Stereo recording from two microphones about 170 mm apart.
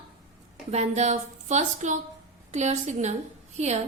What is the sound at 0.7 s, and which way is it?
A woman's voice, 40° right (ahead or behind).